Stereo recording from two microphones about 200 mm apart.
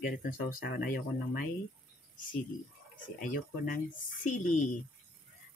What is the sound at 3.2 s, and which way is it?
Speech, 45° left (ahead or behind).